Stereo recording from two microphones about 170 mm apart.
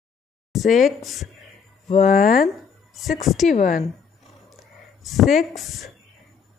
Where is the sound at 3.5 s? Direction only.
55° left (ahead or behind).